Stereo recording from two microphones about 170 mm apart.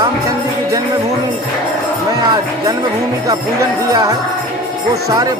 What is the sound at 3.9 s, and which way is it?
Music, 20° right (ahead or behind).